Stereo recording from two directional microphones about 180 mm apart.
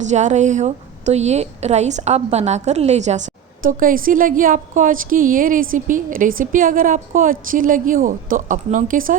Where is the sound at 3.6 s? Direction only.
50° right (ahead or behind).